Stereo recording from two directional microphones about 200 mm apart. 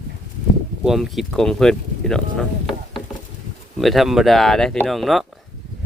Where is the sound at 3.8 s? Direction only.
Centre (ahead or behind).